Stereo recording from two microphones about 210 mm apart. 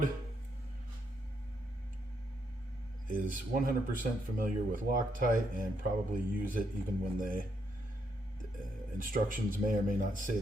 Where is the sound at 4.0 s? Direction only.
40° right (ahead or behind).